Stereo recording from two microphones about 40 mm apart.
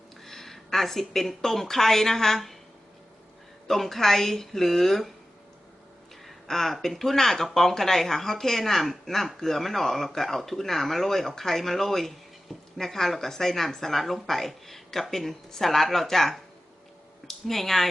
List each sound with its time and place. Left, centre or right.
0.3 s speech: centre
3.7 s speech: centre
6.2 s speech: centre
17.4 s speech: centre